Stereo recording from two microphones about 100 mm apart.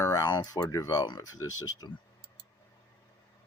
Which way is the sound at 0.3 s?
45° left (ahead or behind).